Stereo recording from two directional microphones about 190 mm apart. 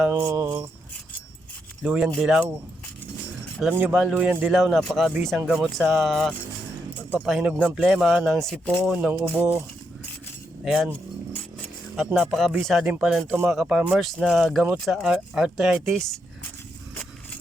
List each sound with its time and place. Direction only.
0.2 s music: 15° right (ahead or behind)
1.8 s speech: 5° right (ahead or behind)
3.6 s speech: 5° right (ahead or behind)
9.2 s music: 10° right (ahead or behind)
10.7 s speech: 5° right (ahead or behind)
11.9 s speech: centre (ahead or behind)